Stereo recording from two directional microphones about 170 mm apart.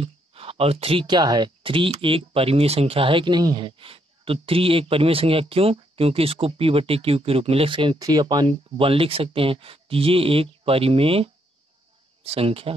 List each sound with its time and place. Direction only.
0.0 s speech: 35° right (ahead or behind)